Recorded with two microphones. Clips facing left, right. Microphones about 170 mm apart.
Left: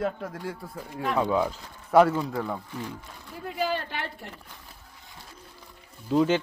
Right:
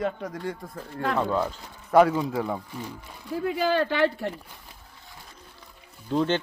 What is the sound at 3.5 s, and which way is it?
Speech, 90° right.